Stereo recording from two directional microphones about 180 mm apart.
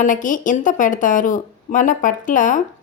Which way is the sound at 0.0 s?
45° left (ahead or behind).